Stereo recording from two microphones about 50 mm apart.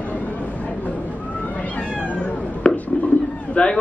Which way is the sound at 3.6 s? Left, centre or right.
Left.